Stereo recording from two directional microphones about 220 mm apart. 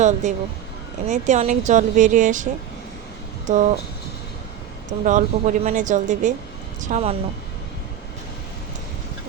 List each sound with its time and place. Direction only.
0.0 s speech: 35° right (ahead or behind)
3.4 s a sound: 35° right (ahead or behind)
4.9 s speech: 35° right (ahead or behind)